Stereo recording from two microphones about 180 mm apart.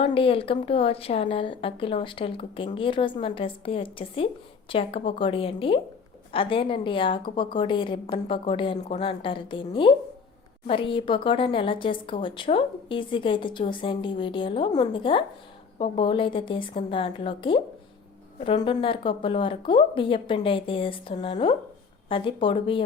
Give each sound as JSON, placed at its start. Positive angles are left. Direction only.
{"t": 0.0, "sound": "a woman's voice", "side_deg": 30}